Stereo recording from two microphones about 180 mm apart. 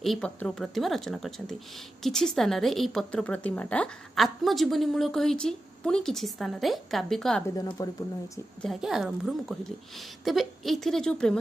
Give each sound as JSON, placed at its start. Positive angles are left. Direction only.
{"t": 0.0, "sound": "a woman's voice", "side_deg": 5}
{"t": 7.4, "sound": "speech", "side_deg": 20}
{"t": 8.6, "sound": "a woman's voice", "side_deg": 0}